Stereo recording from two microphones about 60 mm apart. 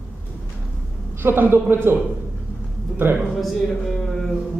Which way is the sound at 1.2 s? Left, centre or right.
Right.